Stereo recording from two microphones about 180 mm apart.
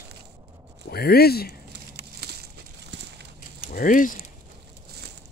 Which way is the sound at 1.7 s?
65° right (ahead or behind).